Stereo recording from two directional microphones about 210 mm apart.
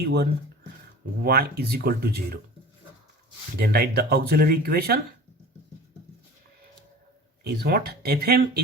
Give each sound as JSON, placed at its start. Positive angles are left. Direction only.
{"t": 0.0, "sound": "speech", "side_deg": -50}
{"t": 3.6, "sound": "speech", "side_deg": -50}
{"t": 7.4, "sound": "speech", "side_deg": -50}